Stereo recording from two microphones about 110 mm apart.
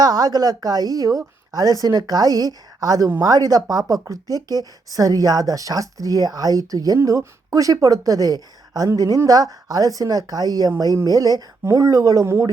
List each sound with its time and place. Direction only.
0.0 s speech: 35° right (ahead or behind)